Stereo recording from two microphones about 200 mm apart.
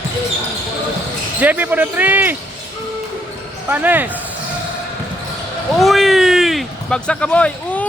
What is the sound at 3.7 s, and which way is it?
Speech, 10° right (ahead or behind).